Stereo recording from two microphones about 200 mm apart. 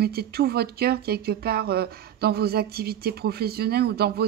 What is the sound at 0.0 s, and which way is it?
Speech, 50° right (ahead or behind).